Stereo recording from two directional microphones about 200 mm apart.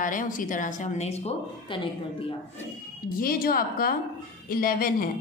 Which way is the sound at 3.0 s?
45° left (ahead or behind).